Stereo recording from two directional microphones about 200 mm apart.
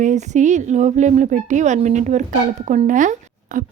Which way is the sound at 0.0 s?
35° right (ahead or behind).